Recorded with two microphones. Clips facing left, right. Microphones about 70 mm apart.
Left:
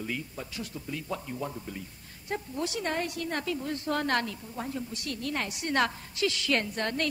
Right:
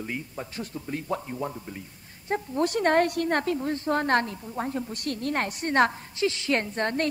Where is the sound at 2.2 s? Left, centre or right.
Right.